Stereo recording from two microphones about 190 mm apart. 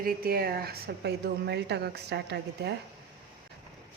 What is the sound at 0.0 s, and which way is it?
A woman's voice, 55° right (ahead or behind).